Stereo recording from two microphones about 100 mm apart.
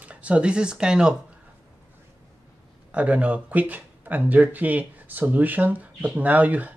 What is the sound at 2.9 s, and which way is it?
Speech, 15° right (ahead or behind).